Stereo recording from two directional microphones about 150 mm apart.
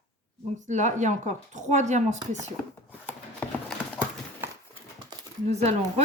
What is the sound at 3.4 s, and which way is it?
Clip-clop, 10° left (ahead or behind).